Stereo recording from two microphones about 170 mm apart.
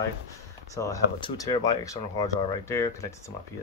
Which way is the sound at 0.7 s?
20° left (ahead or behind).